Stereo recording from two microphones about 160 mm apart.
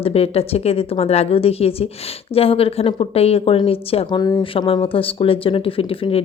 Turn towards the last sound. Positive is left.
turn(degrees=35)  # may be behind; listen again after turning